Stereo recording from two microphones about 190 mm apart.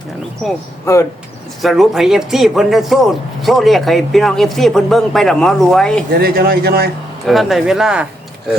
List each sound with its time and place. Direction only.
1.6 s a man's voice: centre (ahead or behind)
6.1 s a man's voice: 55° right (ahead or behind)
7.3 s a man's voice: centre (ahead or behind)